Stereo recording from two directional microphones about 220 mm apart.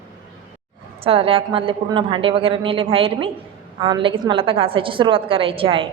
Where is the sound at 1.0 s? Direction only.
25° right (ahead or behind).